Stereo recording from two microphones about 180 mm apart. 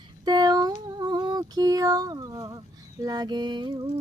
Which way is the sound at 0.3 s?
20° right (ahead or behind).